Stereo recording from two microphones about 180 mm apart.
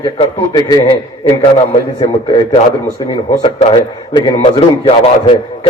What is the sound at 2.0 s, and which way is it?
A man's voice, 25° left (ahead or behind).